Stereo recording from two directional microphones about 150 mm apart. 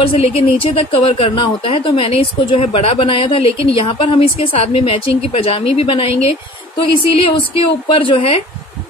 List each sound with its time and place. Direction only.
0.0 s a woman's voice: 40° left (ahead or behind)